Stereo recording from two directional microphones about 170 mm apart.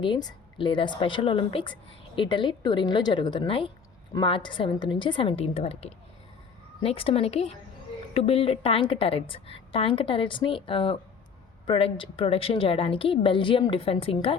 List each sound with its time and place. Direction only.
0.0 s a woman's voice: 25° left (ahead or behind)